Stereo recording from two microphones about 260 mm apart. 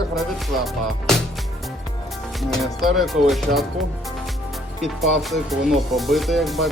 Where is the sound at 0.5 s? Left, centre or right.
Centre.